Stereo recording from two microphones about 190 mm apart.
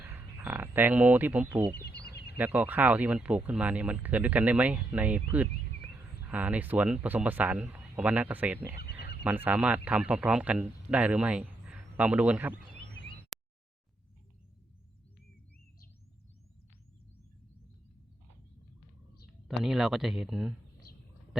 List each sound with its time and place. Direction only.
0.0 s speech: 10° right (ahead or behind)
2.0 s a sound: 60° left (ahead or behind)
2.4 s a man's voice: 10° right (ahead or behind)
8.8 s wild animals: 60° left (ahead or behind)
9.2 s a man's voice: 10° right (ahead or behind)
13.3 s a sound: centre (ahead or behind)
19.5 s speech: centre (ahead or behind)